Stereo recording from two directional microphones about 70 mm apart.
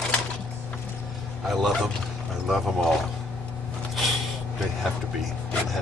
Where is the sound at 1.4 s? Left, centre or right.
Centre.